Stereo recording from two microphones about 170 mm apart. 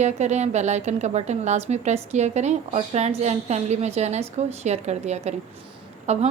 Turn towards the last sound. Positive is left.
turn(degrees=-40)  # may be behind; listen again after turning